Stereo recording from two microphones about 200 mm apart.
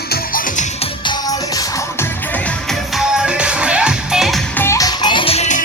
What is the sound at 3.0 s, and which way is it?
Music, 5° right (ahead or behind).